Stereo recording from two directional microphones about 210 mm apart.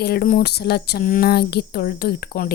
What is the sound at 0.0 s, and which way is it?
A woman's voice, 45° left (ahead or behind).